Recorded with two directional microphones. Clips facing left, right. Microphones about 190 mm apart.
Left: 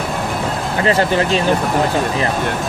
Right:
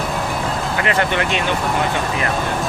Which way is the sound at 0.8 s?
35° left (ahead or behind).